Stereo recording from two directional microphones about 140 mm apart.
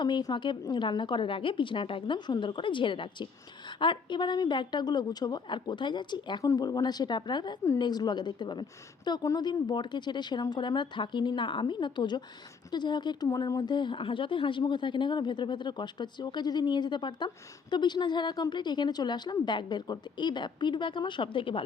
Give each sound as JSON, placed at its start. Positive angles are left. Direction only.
{"t": 0.0, "sound": "a woman's voice", "side_deg": 30}